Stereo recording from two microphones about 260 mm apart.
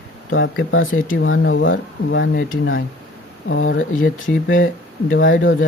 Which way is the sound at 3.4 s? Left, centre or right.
Left.